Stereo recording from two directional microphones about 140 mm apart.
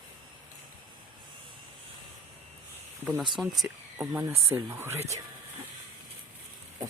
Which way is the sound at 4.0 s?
15° right (ahead or behind).